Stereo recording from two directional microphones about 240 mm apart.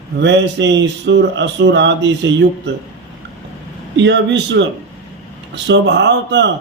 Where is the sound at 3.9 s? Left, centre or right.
Right.